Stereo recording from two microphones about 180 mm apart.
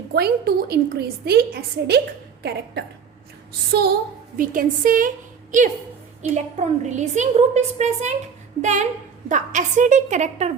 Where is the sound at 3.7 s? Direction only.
65° right (ahead or behind).